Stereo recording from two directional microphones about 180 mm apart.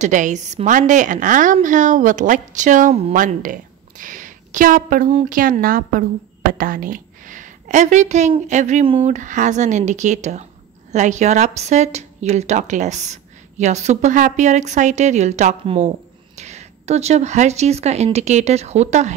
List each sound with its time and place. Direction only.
0.0 s a woman's voice: 45° right (ahead or behind)